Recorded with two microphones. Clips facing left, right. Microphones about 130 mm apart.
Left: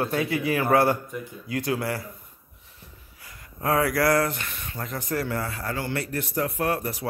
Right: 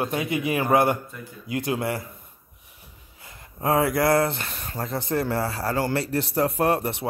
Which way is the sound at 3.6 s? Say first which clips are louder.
Right 1 dB; 25° right (ahead or behind).